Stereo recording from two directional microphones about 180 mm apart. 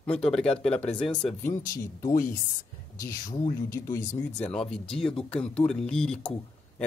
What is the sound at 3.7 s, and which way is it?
Speech, 15° left (ahead or behind).